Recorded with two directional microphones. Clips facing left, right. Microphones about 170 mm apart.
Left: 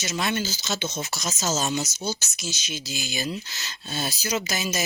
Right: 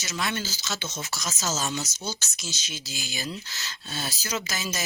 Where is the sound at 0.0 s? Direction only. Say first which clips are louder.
Left 4 dB; 20° left (ahead or behind).